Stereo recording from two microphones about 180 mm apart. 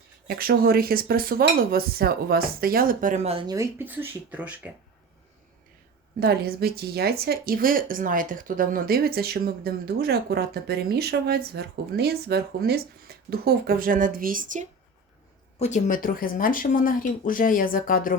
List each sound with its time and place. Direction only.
0.3 s speech: 55° right (ahead or behind); by 3.4 s 35° right (ahead or behind)
3.4 s speech: 20° right (ahead or behind)
6.1 s speech: 60° right (ahead or behind)
15.5 s speech: 40° left (ahead or behind)